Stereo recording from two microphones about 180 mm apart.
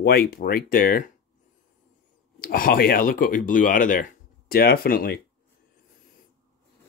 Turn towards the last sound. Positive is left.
turn(degrees=55)  # may be behind; listen again after turning